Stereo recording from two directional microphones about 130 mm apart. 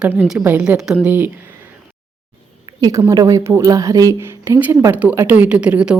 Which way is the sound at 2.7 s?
30° right (ahead or behind).